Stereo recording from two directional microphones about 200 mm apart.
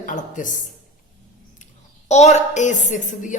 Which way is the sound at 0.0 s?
40° left (ahead or behind).